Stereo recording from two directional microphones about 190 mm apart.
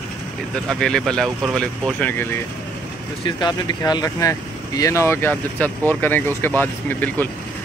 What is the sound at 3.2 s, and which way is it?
Speech, 20° left (ahead or behind).